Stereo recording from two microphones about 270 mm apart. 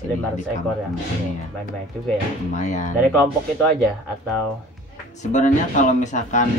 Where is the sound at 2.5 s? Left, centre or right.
Left.